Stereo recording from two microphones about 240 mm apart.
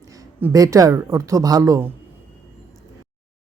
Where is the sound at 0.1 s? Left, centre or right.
Centre.